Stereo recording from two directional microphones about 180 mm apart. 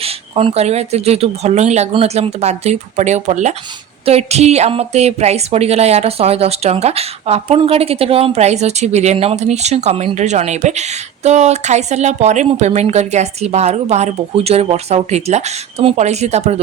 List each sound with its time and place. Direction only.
0.0 s a woman's voice: 30° right (ahead or behind)